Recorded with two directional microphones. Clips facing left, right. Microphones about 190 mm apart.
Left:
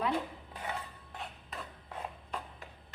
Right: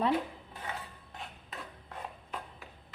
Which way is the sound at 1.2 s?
Centre (ahead or behind).